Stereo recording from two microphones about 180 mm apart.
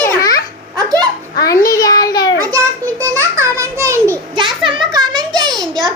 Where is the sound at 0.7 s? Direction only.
20° right (ahead or behind).